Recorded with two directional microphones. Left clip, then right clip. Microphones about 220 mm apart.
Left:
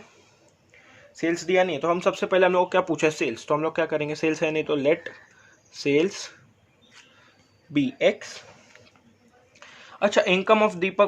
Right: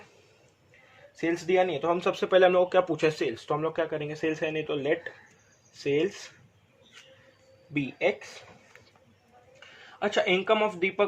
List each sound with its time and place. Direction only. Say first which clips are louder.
1.1 s speech: left 3 dB; 25° left (ahead or behind); by 6.3 s 40° left (ahead or behind)
7.7 s speech: left 6 dB; 40° left (ahead or behind)
10.0 s speech: left 5 dB; 40° left (ahead or behind)